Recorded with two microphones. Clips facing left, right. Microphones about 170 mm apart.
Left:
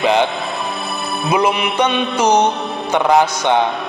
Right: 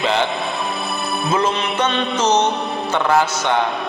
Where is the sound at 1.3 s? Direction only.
10° left (ahead or behind).